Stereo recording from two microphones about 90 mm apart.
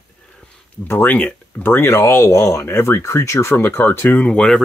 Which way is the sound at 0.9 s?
25° left (ahead or behind).